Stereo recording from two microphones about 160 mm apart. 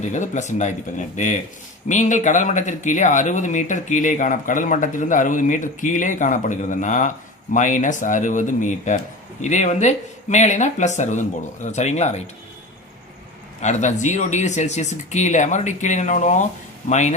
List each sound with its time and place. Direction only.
0.0 s speech: 50° left (ahead or behind)
13.6 s speech: 45° left (ahead or behind)